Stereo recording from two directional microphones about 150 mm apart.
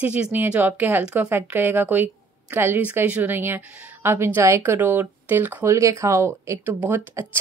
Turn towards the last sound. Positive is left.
turn(degrees=-15)  # may be behind; listen again after turning